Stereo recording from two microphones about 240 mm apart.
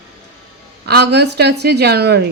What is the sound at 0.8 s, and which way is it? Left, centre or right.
Speech, right.